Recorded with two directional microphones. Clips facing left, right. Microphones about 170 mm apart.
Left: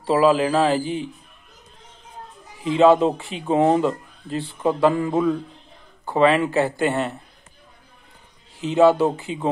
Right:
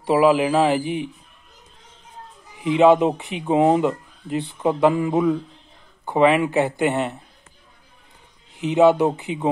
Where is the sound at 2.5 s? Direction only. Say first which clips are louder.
Even; 20° right (ahead or behind).